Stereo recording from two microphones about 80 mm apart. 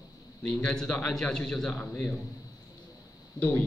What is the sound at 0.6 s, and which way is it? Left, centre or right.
A man's voice, centre.